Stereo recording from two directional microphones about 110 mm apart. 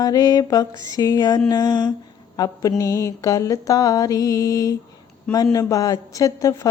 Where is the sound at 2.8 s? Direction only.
30° left (ahead or behind).